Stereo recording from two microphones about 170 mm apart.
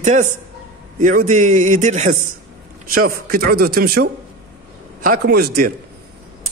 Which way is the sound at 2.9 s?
60° right (ahead or behind).